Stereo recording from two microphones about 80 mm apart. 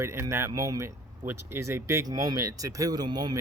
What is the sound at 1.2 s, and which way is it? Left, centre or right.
Speech, right.